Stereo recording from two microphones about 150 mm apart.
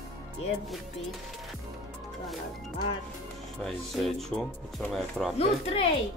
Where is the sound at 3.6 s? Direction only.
Centre (ahead or behind).